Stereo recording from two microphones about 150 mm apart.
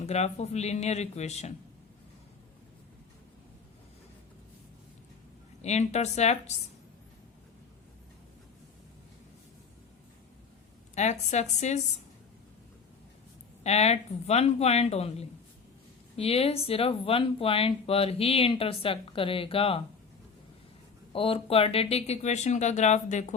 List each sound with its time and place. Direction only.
0.0 s speech: 45° left (ahead or behind)
5.6 s speech: 50° left (ahead or behind)
10.9 s speech: 50° left (ahead or behind)
13.7 s speech: 45° left (ahead or behind)
21.1 s speech: 35° left (ahead or behind)